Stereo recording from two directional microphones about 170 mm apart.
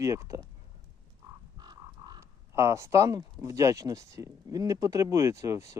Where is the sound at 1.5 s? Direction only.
25° right (ahead or behind).